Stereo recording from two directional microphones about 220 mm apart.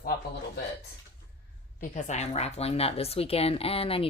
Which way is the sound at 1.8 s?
35° left (ahead or behind).